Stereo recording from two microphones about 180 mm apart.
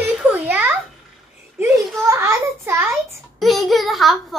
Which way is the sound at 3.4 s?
Centre (ahead or behind).